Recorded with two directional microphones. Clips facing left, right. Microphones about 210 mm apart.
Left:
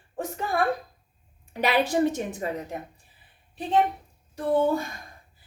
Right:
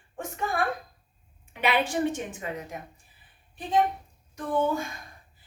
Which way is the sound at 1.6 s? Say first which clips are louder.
Left 3 dB; 40° left (ahead or behind).